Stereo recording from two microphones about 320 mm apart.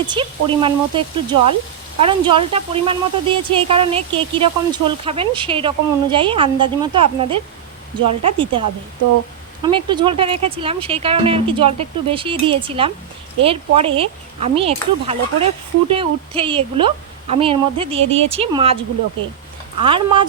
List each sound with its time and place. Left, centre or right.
0.1 s speech: centre
9.6 s speech: centre
19.8 s speech: centre